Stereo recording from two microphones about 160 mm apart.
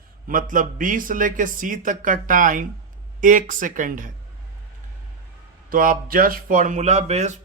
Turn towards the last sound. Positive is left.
turn(degrees=-45)  # may be behind; listen again after turning